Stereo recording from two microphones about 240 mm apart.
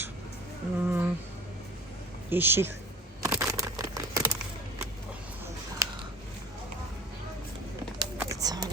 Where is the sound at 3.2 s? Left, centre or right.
Centre.